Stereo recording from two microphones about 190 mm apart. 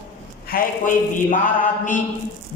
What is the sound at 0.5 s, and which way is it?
Speech, 50° left (ahead or behind).